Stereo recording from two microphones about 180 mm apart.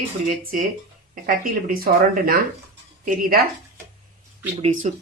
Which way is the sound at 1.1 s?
50° right (ahead or behind).